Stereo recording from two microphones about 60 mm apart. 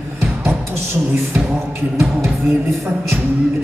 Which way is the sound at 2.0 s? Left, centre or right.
Right.